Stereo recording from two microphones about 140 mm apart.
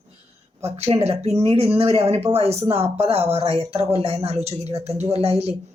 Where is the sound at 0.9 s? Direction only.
50° right (ahead or behind).